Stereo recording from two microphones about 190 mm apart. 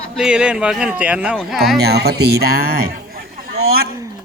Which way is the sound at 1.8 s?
60° right (ahead or behind).